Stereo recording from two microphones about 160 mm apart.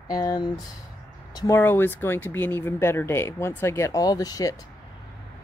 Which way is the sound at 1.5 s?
15° left (ahead or behind).